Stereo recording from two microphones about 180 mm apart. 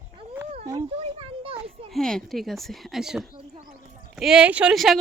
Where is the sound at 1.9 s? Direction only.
5° left (ahead or behind).